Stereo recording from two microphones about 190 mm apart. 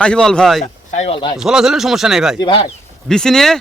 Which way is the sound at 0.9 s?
35° left (ahead or behind).